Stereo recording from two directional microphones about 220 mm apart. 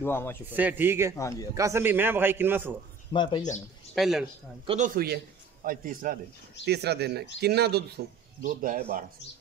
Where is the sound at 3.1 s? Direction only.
20° left (ahead or behind).